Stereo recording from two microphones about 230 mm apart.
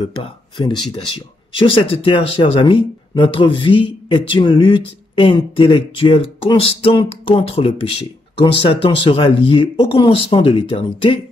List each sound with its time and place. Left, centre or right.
0.6 s speech: centre